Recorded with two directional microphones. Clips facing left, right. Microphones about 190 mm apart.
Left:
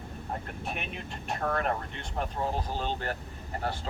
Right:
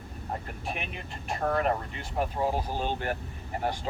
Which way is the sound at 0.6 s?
Centre (ahead or behind).